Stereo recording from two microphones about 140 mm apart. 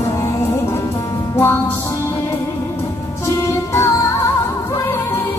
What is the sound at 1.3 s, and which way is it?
Music, 15° left (ahead or behind).